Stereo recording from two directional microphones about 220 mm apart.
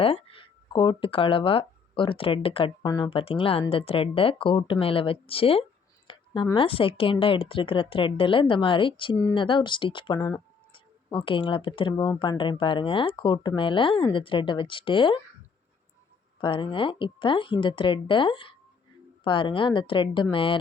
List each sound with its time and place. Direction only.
0.0 s speech: 25° left (ahead or behind)
16.4 s speech: 20° left (ahead or behind)